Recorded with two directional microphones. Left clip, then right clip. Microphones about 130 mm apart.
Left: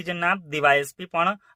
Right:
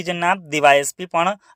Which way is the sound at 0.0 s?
35° right (ahead or behind).